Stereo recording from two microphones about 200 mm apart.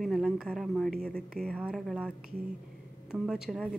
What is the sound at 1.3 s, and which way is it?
A woman's voice, 5° left (ahead or behind).